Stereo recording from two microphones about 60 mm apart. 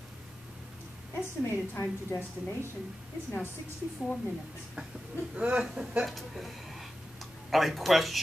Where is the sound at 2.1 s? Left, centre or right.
Left.